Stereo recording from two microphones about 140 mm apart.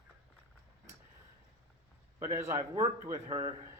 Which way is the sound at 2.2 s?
20° right (ahead or behind).